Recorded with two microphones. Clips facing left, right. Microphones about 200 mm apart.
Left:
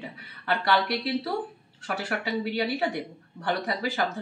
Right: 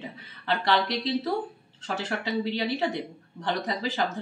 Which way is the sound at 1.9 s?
20° right (ahead or behind).